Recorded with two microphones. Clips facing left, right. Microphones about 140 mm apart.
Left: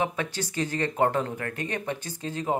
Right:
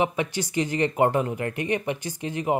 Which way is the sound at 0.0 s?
15° right (ahead or behind).